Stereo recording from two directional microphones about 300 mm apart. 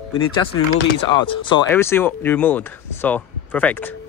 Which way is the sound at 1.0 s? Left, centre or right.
Centre.